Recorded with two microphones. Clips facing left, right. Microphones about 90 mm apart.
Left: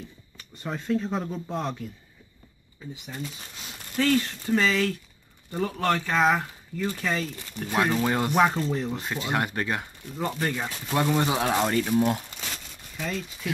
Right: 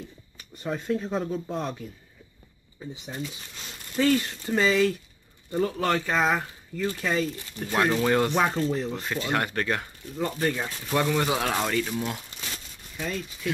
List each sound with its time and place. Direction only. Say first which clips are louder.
0.7 s speech: even; 5° right (ahead or behind)
4.0 s speech: right 1 dB; 10° right (ahead or behind)
9.0 s speech: even; 15° left (ahead or behind)
11.0 s speech: left 1 dB; 20° left (ahead or behind)
12.9 s speech: even; 5° right (ahead or behind)